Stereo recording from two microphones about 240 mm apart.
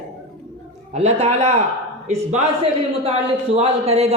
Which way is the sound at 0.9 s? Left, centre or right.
Right.